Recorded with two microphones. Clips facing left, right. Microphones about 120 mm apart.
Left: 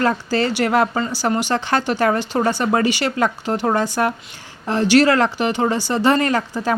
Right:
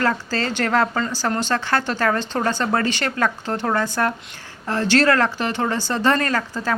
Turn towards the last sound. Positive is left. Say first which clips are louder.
# left 3 dB
turn(degrees=15)  # may be behind; listen again after turning